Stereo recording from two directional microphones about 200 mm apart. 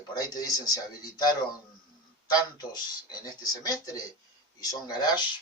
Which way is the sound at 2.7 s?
20° left (ahead or behind).